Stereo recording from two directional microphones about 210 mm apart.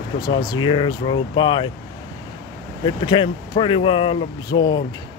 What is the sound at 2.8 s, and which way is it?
Speech, 20° left (ahead or behind).